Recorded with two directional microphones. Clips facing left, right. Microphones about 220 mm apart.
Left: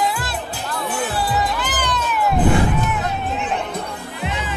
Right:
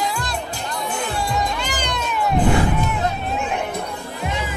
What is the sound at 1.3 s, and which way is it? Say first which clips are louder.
Music: left 1 dB; 5° left (ahead or behind).